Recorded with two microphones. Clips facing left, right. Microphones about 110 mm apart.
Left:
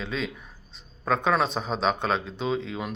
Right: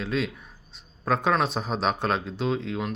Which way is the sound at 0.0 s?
Centre (ahead or behind).